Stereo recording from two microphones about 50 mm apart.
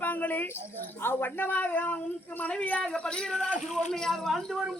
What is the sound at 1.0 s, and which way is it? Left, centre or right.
A man's voice, left.